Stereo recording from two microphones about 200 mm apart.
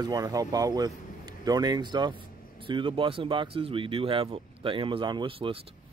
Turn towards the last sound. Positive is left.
turn(degrees=-25)  # may be behind; listen again after turning